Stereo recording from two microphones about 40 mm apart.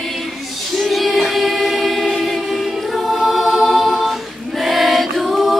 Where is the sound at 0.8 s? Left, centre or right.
Centre.